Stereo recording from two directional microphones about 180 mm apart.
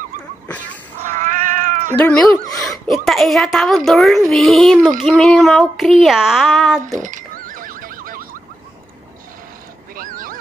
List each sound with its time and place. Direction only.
1.2 s cat: 45° right (ahead or behind)
2.0 s a woman's voice: 5° left (ahead or behind)
7.0 s horse: 45° right (ahead or behind)
9.9 s neigh: 50° right (ahead or behind)